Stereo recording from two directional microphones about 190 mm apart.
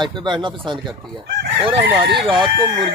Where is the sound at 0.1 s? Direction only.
25° right (ahead or behind).